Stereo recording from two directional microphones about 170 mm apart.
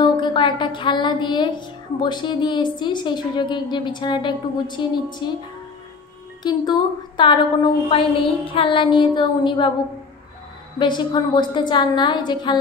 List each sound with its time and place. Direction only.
0.0 s a woman's voice: 25° left (ahead or behind)
6.4 s a woman's voice: 25° left (ahead or behind)
10.8 s a woman's voice: 25° left (ahead or behind)